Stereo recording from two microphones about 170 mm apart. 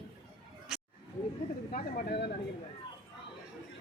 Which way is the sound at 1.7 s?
75° left (ahead or behind).